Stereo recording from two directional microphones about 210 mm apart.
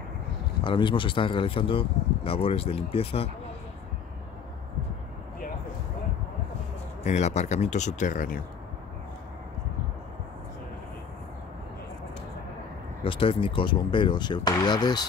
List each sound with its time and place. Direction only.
0.7 s speech: 20° left (ahead or behind)
7.0 s speech: 30° left (ahead or behind)
13.0 s speech: 25° left (ahead or behind)